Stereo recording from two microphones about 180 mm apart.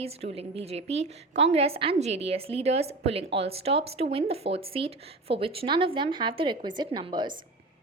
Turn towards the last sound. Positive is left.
turn(degrees=-25)  # may be behind; listen again after turning